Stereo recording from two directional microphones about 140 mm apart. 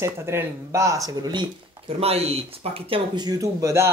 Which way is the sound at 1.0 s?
30° right (ahead or behind).